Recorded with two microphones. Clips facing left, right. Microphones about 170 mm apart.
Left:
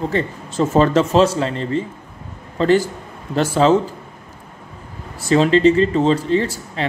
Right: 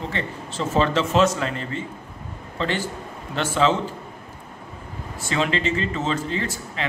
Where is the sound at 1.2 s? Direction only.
30° left (ahead or behind).